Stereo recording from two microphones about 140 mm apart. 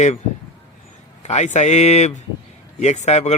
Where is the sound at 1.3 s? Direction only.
55° left (ahead or behind).